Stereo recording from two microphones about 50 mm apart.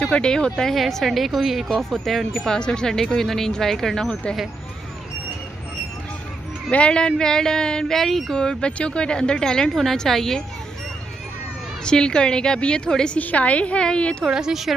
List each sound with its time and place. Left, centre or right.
0.0 s speech: centre
0.6 s speech: centre
2.5 s a woman's voice: centre
6.7 s a woman's voice: left
8.0 s speech: centre
8.4 s a woman's voice: centre
11.8 s a woman's voice: centre
13.2 s a woman's voice: left
14.3 s a woman's voice: centre